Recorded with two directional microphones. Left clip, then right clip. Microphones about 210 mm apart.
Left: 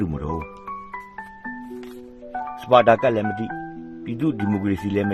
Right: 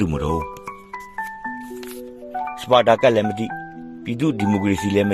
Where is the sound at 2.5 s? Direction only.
10° right (ahead or behind).